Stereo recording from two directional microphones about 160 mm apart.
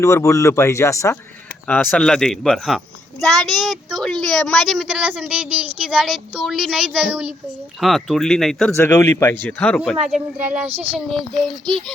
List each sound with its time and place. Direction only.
0.0 s speech: 20° left (ahead or behind)
1.6 s a child's voice: 10° left (ahead or behind)
8.7 s speech: 15° left (ahead or behind)
10.0 s speech: 5° right (ahead or behind)
10.7 s speech: 40° right (ahead or behind)
10.9 s speech: centre (ahead or behind)